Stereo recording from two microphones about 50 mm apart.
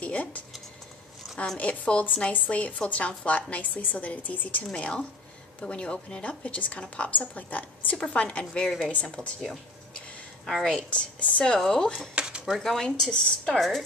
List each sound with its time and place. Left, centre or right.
0.0 s speech: left
1.6 s a woman's voice: left
4.7 s a woman's voice: left
6.2 s a woman's voice: left
8.6 s speech: centre
10.4 s speech: centre
10.8 s a woman's voice: left
11.5 s speech: centre
12.2 s dishes: right
12.4 s speech: centre
12.8 s speech: centre
13.6 s speech: centre